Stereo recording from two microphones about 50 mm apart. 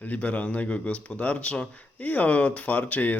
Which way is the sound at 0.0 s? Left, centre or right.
Left.